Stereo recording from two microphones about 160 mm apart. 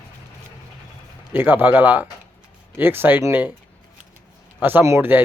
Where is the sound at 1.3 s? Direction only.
10° right (ahead or behind).